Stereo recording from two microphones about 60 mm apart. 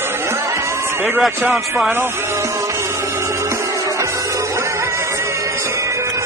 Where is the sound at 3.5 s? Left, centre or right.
Right.